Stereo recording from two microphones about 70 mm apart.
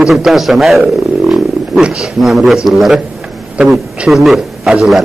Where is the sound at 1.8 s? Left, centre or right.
Centre.